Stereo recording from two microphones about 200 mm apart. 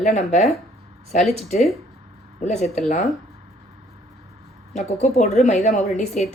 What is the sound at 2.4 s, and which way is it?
Speech, 35° left (ahead or behind).